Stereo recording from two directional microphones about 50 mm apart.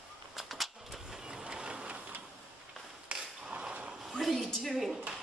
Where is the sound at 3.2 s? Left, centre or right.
Centre.